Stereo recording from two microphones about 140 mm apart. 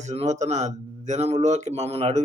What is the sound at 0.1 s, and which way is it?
A man's voice, 55° right (ahead or behind).